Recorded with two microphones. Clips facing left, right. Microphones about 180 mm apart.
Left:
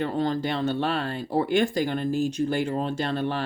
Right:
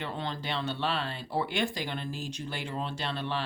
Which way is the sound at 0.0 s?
45° left (ahead or behind).